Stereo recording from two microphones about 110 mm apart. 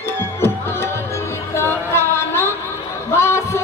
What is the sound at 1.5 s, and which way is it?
Music, 20° left (ahead or behind).